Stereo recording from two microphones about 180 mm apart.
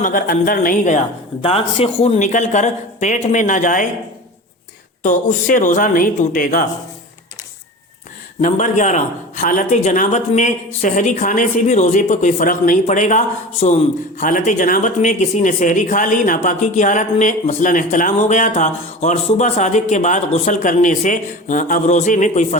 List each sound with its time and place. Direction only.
0.0 s a man's voice: 50° left (ahead or behind)
1.4 s speech: 30° left (ahead or behind); by 3.8 s 45° left (ahead or behind)
5.0 s a man's voice: 45° left (ahead or behind)
8.4 s a man's voice: 45° left (ahead or behind)